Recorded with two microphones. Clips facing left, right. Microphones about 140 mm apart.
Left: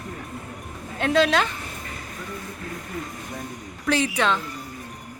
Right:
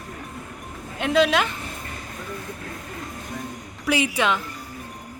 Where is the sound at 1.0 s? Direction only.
Centre (ahead or behind).